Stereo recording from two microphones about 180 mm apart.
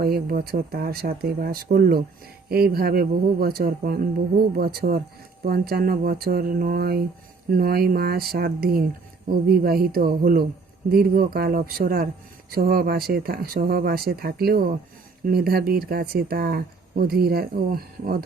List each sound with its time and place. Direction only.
0.0 s speech: 60° right (ahead or behind)